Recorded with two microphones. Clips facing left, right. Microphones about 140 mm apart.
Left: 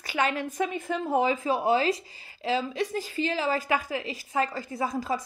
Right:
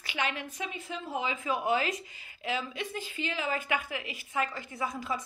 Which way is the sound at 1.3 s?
30° left (ahead or behind).